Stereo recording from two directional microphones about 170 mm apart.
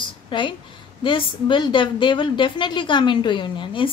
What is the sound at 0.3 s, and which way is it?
A woman's voice, 30° left (ahead or behind).